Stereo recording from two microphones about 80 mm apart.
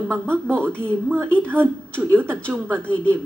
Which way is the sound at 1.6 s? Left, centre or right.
Right.